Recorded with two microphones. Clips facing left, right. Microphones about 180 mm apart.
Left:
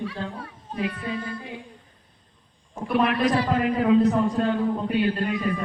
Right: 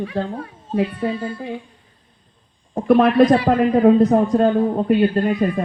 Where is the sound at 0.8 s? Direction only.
25° right (ahead or behind).